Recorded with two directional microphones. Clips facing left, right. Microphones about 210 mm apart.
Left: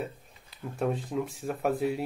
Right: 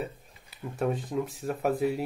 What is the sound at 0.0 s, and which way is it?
Speech, centre (ahead or behind).